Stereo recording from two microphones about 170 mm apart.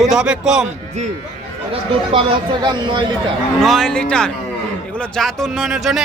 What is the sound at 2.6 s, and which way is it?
Speech, 25° right (ahead or behind).